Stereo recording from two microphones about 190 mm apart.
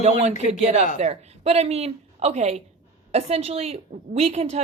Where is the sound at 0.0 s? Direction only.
35° right (ahead or behind).